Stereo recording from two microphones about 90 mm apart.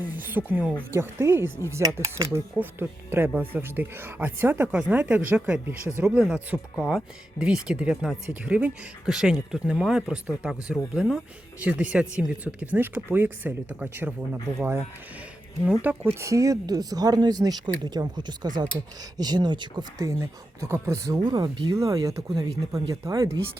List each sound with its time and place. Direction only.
0.0 s a sound: 20° right (ahead or behind)
0.9 s speech: 25° right (ahead or behind)
2.6 s speech: 20° right (ahead or behind)
14.6 s speech: 30° right (ahead or behind)
15.8 s speech: 20° right (ahead or behind)
16.2 s speech: 40° right (ahead or behind); by 19.8 s 55° right (ahead or behind)
20.0 s speech: 40° right (ahead or behind)
21.2 s speech: 55° right (ahead or behind)
21.7 s speech: 35° right (ahead or behind)